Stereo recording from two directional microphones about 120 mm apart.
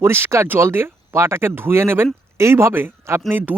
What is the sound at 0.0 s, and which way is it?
Speech, 20° right (ahead or behind).